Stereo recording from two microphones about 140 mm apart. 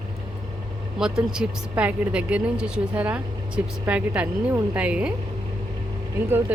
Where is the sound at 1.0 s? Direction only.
5° right (ahead or behind).